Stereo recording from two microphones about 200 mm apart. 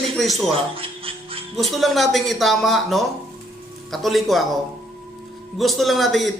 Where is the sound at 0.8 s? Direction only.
25° right (ahead or behind).